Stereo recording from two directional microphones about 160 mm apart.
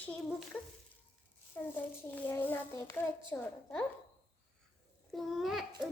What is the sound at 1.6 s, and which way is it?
A child's voice, 15° left (ahead or behind).